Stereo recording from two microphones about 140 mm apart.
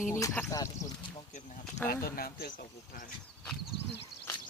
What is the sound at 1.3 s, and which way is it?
Speech, 60° left (ahead or behind).